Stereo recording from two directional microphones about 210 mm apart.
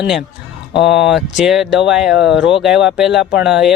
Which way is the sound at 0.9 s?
Centre (ahead or behind).